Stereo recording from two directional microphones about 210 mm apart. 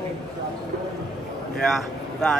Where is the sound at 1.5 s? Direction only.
5° left (ahead or behind).